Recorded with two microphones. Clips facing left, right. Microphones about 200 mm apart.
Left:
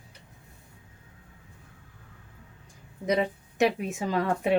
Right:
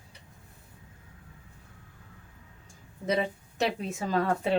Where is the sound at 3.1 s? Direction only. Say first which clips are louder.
Left 2 dB; 15° left (ahead or behind).